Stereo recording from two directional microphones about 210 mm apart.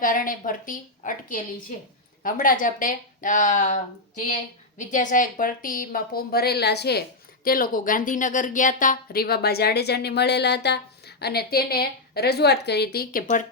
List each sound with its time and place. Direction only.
0.0 s speech: 40° left (ahead or behind)
4.8 s speech: 35° left (ahead or behind)